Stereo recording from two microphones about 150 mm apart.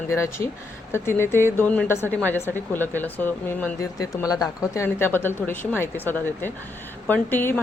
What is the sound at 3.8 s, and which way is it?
A woman's voice, 20° left (ahead or behind).